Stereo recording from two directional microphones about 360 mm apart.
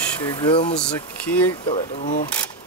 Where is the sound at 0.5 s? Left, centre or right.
Centre.